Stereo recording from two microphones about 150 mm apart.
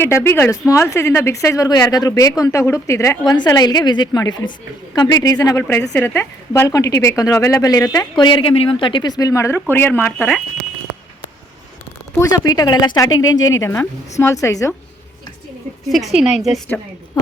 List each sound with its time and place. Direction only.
0.0 s a woman's voice: 15° left (ahead or behind)
12.2 s a woman's voice: 25° left (ahead or behind)
15.9 s speech: centre (ahead or behind)